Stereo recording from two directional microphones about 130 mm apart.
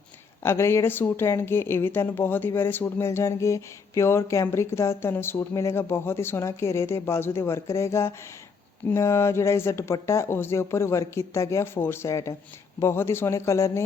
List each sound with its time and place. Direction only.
0.4 s speech: 20° left (ahead or behind)